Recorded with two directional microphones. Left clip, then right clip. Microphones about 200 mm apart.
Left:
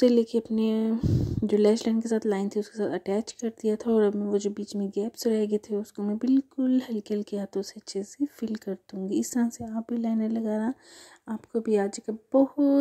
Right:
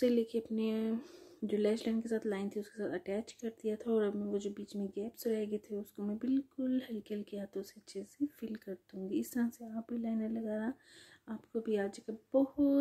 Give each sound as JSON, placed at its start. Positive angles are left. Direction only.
{"t": 0.0, "sound": "speech", "side_deg": 30}